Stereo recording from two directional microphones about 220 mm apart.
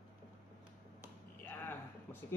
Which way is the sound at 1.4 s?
10° left (ahead or behind).